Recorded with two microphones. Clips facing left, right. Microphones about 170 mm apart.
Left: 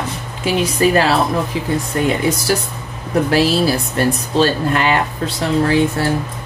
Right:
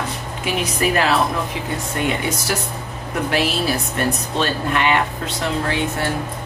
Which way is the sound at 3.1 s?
35° left (ahead or behind).